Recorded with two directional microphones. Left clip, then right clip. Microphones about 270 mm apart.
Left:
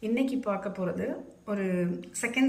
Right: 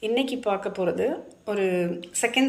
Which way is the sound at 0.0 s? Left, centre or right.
Centre.